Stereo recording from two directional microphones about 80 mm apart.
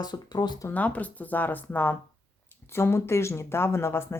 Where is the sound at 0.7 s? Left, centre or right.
Centre.